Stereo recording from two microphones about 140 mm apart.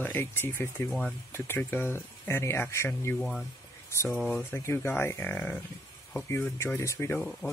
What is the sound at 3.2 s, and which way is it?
Speech, centre (ahead or behind).